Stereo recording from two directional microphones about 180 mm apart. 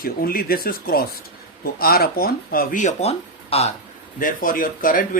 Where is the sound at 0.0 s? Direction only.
55° left (ahead or behind); by 3.7 s 35° left (ahead or behind).